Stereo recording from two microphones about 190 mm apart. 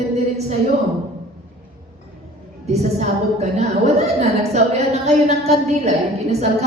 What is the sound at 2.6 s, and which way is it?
A woman's voice, 35° right (ahead or behind).